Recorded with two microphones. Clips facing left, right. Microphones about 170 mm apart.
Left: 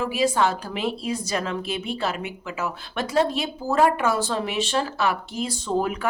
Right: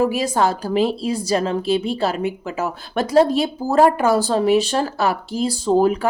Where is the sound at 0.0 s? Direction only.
40° right (ahead or behind).